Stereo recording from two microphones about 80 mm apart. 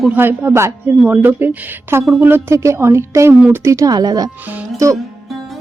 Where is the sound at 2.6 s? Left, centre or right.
Right.